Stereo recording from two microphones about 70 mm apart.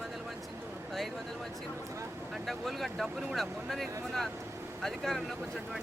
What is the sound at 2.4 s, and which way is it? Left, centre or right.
Speech, centre.